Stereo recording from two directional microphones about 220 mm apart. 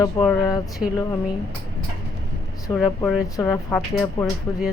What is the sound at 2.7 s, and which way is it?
Speech, 20° left (ahead or behind).